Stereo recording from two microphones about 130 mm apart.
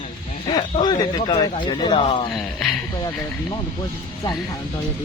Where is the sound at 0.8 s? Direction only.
30° left (ahead or behind).